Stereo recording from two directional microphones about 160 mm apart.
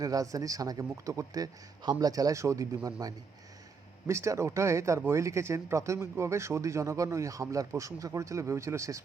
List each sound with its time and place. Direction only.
0.0 s a man's voice: 20° right (ahead or behind)